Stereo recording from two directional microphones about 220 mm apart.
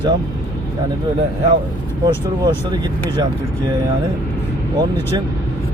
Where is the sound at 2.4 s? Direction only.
20° right (ahead or behind).